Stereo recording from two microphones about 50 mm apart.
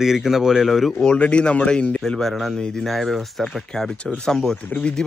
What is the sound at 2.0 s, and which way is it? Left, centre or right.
Speech, centre.